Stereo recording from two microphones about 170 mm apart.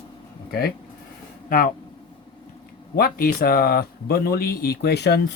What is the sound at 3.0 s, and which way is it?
Speech, 60° left (ahead or behind).